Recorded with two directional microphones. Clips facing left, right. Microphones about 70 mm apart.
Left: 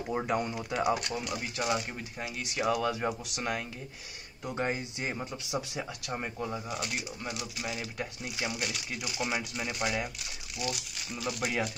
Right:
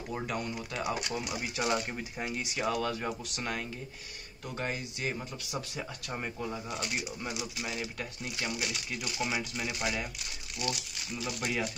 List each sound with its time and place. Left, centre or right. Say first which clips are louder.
0.1 s speech: left 5 dB; left
0.7 s speech: left 6 dB; centre
4.5 s speech: left 4 dB; left
6.0 s speech: left 1 dB; centre
8.0 s speech: left 2 dB; centre
8.5 s speech: even; centre